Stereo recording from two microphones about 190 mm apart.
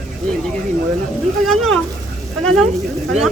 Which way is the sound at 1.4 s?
Centre (ahead or behind).